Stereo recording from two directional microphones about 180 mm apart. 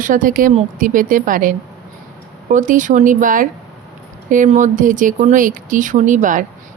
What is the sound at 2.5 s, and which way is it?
A woman's voice, 45° right (ahead or behind).